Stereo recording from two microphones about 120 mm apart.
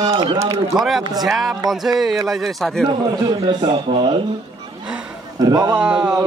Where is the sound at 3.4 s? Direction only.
45° right (ahead or behind).